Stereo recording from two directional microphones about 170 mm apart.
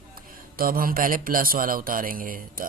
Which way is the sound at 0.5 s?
60° right (ahead or behind).